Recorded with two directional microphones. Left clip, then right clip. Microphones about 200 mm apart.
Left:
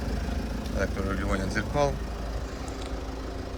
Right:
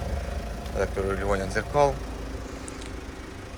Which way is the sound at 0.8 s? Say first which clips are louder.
Right 4 dB; centre (ahead or behind).